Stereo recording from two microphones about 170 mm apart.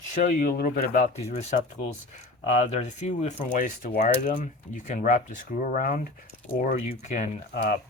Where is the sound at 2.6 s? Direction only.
45° left (ahead or behind).